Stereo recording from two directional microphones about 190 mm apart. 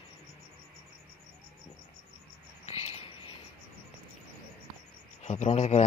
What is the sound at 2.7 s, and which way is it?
Cricket, 35° left (ahead or behind).